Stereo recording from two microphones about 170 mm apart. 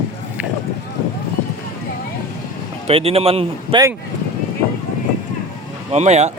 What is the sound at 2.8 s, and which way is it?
Speech, 35° right (ahead or behind).